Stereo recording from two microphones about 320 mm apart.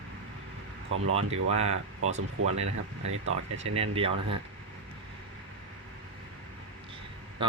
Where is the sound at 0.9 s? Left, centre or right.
Right.